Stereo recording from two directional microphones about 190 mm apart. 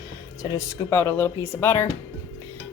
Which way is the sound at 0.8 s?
15° left (ahead or behind).